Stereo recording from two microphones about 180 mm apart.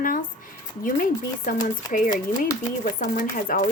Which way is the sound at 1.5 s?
50° left (ahead or behind).